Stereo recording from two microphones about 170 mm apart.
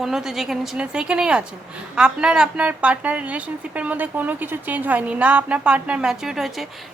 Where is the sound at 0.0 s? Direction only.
Centre (ahead or behind).